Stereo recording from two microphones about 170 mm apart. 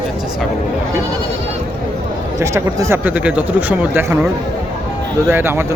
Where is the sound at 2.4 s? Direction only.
15° right (ahead or behind).